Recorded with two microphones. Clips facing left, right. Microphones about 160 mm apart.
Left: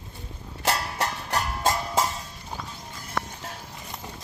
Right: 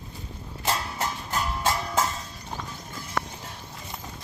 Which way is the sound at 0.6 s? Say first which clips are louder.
Left 2 dB; 70° left (ahead or behind).